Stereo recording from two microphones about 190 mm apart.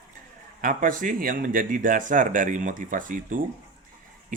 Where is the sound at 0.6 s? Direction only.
45° right (ahead or behind).